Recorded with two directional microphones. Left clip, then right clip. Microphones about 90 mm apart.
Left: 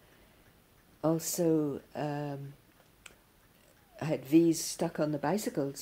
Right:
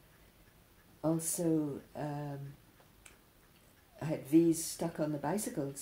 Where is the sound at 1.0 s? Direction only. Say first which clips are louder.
Left 4 dB; 30° left (ahead or behind).